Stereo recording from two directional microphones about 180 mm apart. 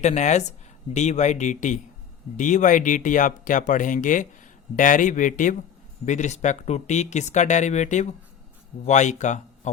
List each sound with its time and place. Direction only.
0.0 s speech: 40° left (ahead or behind)